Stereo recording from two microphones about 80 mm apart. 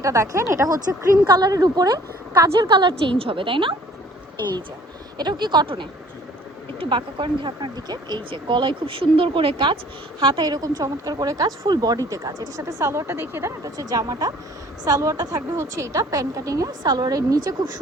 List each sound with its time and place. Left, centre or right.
0.0 s a woman's voice: right
1.3 s speech: right
2.6 s a woman's voice: right
3.1 s speech: right
5.1 s speech: right
6.9 s speech: right
12.5 s a woman's voice: right
13.7 s a woman's voice: right
15.5 s a woman's voice: right